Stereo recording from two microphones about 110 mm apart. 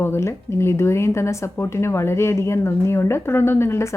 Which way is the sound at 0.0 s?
25° left (ahead or behind).